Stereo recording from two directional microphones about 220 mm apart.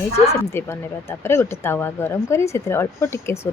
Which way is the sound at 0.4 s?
10° left (ahead or behind).